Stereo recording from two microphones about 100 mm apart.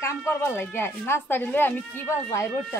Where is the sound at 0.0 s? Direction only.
25° left (ahead or behind).